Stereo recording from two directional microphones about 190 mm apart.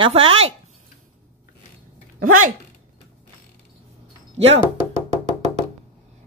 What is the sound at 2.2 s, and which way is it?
Speech, 90° right.